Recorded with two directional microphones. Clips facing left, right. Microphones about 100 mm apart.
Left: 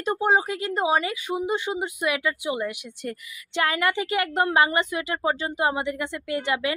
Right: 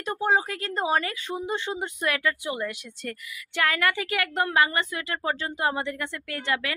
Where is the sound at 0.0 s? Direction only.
20° left (ahead or behind).